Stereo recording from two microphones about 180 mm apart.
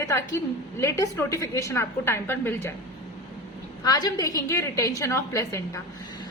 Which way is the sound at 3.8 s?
20° left (ahead or behind).